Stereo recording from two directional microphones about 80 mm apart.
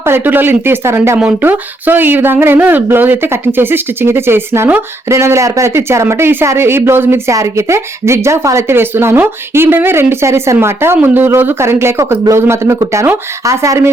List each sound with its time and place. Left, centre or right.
0.0 s speech: right